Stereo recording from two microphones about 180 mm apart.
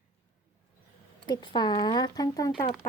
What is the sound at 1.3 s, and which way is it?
Speech, 25° left (ahead or behind).